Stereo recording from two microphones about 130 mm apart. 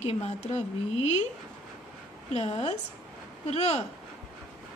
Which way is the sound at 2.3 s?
55° left (ahead or behind).